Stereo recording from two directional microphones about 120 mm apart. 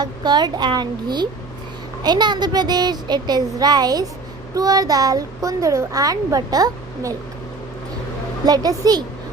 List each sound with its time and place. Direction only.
0.0 s a child's voice: 35° right (ahead or behind)
8.4 s a child's voice: 30° right (ahead or behind)